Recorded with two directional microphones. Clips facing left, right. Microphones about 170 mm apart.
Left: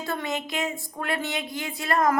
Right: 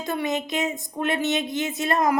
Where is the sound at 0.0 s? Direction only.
15° right (ahead or behind).